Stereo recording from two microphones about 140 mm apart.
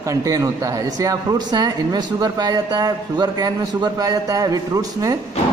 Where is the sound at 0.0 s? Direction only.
25° right (ahead or behind).